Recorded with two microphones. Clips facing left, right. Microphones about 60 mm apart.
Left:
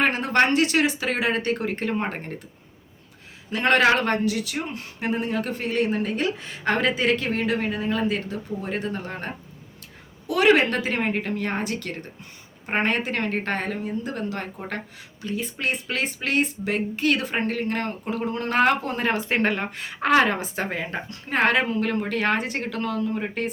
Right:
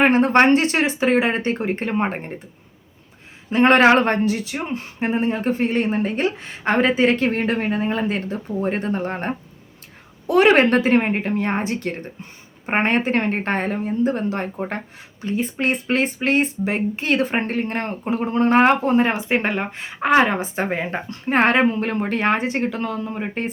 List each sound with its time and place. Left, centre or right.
0.0 s speech: right
3.5 s speech: right